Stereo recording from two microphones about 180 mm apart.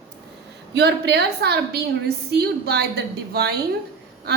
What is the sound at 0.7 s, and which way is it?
A woman's voice, 65° right (ahead or behind).